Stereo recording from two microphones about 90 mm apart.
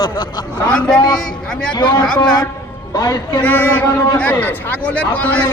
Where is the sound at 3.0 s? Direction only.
45° left (ahead or behind).